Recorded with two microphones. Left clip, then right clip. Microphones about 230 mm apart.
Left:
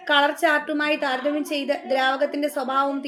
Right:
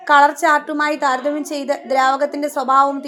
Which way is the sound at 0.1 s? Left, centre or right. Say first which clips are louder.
Right 7 dB; centre.